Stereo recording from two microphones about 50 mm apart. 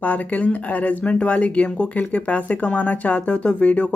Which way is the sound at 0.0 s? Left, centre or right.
Left.